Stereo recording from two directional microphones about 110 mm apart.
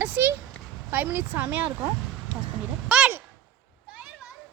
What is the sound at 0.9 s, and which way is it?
Speech, 20° right (ahead or behind).